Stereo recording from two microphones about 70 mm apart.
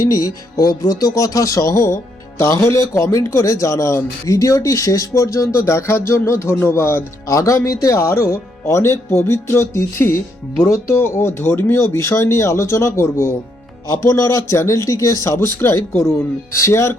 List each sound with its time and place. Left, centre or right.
0.0 s speech: left
2.4 s music: left
2.9 s speech: left
7.3 s speech: left
9.1 s music: left
10.8 s speech: left